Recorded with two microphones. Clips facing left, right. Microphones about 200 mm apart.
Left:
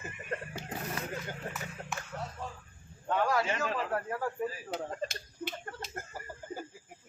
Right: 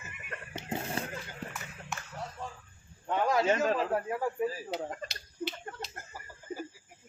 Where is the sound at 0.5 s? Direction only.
25° right (ahead or behind).